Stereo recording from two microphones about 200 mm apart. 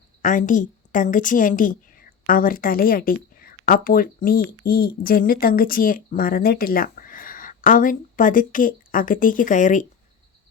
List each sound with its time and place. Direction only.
0.2 s a woman's voice: 40° left (ahead or behind)